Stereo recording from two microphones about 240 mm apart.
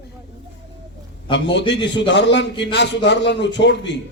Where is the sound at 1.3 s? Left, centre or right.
Left.